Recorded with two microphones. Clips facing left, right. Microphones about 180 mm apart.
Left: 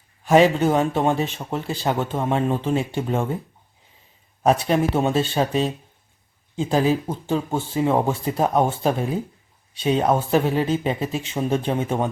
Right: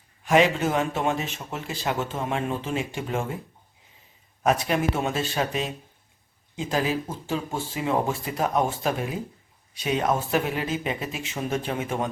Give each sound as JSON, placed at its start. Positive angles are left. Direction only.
{"t": 0.3, "sound": "speech", "side_deg": 35}
{"t": 4.4, "sound": "speech", "side_deg": 30}